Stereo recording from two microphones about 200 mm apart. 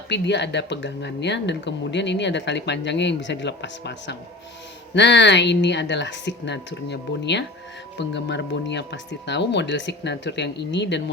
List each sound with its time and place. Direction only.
0.1 s speech: 60° left (ahead or behind)